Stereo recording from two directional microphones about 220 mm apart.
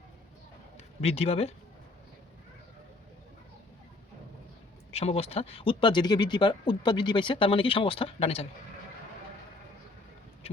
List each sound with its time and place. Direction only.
1.0 s speech: 30° left (ahead or behind)
4.9 s speech: 30° left (ahead or behind)